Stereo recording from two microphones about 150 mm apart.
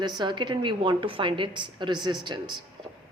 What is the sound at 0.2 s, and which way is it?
A woman's voice, 30° right (ahead or behind).